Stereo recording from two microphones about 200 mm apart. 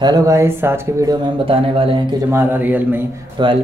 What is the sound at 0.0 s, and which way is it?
Speech, 15° right (ahead or behind).